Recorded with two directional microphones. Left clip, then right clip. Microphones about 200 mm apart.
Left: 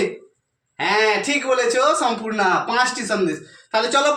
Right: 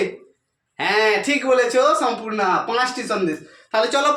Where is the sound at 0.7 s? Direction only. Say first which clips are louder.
Even; 25° right (ahead or behind).